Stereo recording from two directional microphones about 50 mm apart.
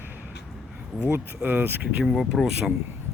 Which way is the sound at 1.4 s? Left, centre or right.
Right.